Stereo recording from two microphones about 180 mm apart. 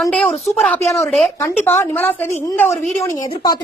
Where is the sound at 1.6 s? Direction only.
15° left (ahead or behind).